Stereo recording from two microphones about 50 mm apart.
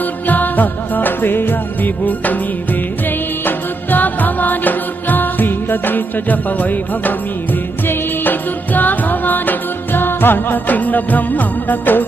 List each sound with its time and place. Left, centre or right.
0.0 s music: left